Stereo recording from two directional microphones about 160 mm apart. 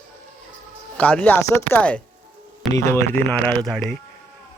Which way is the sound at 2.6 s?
Centre (ahead or behind).